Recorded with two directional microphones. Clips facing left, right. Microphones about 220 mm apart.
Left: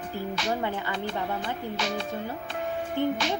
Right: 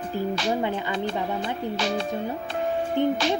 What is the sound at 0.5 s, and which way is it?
Speech, 15° right (ahead or behind).